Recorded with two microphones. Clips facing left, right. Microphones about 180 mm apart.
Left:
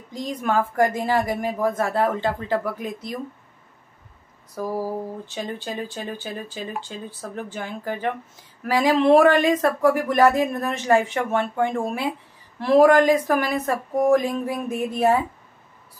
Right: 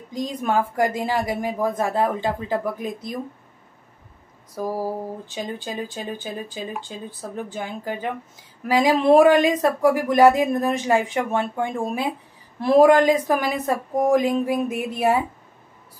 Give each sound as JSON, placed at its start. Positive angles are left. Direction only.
{"t": 0.1, "sound": "speech", "side_deg": -15}
{"t": 5.2, "sound": "speech", "side_deg": -15}